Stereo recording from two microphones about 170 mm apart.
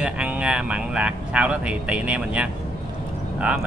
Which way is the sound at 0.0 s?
5° right (ahead or behind).